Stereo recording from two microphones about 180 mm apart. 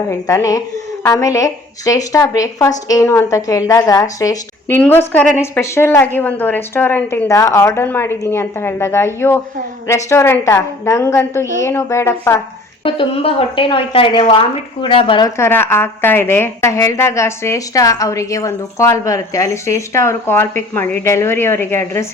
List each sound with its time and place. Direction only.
0.1 s a woman's voice: 15° left (ahead or behind)
12.8 s speech: 30° left (ahead or behind)
15.4 s a woman's voice: 15° left (ahead or behind)